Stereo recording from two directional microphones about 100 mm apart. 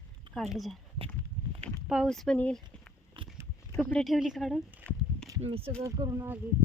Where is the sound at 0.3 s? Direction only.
Centre (ahead or behind).